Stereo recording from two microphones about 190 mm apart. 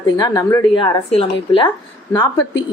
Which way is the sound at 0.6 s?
25° left (ahead or behind).